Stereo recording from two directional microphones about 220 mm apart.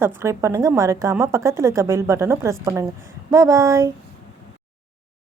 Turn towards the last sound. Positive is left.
turn(degrees=-15)  # may be behind; listen again after turning